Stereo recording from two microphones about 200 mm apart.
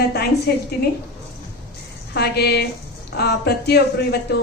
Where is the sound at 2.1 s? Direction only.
55° left (ahead or behind).